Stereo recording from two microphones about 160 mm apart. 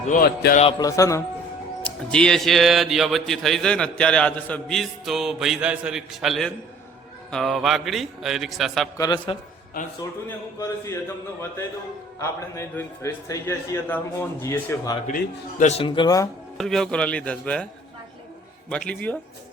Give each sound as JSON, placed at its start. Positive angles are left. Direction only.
{"t": 0.0, "sound": "speech", "side_deg": 55}
{"t": 0.8, "sound": "a man's voice", "side_deg": 20}
{"t": 1.8, "sound": "a man's voice", "side_deg": 5}
{"t": 9.0, "sound": "a man's voice", "side_deg": 25}
{"t": 10.2, "sound": "a man's voice", "side_deg": 20}
{"t": 12.2, "sound": "a man's voice", "side_deg": 20}
{"t": 15.0, "sound": "speech", "side_deg": 50}
{"t": 16.6, "sound": "a man's voice", "side_deg": 5}
{"t": 18.7, "sound": "a man's voice", "side_deg": 5}